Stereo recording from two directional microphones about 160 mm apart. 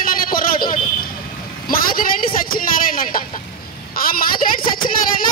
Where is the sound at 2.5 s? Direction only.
60° left (ahead or behind).